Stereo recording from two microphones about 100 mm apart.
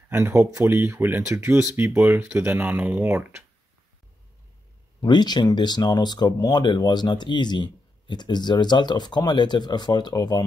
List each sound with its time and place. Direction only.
0.1 s speech: 25° right (ahead or behind)
5.0 s speech: 45° left (ahead or behind)